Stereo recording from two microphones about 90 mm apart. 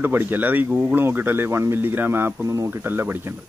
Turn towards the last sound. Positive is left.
turn(degrees=-25)  # may be behind; listen again after turning